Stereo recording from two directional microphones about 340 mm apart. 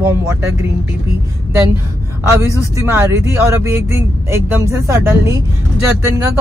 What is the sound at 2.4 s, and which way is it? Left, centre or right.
Speech, centre.